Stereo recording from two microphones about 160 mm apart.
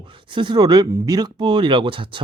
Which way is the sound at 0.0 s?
30° right (ahead or behind).